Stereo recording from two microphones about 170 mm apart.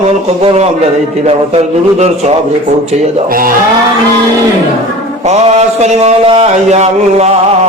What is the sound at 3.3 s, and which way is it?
Speech, 55° right (ahead or behind).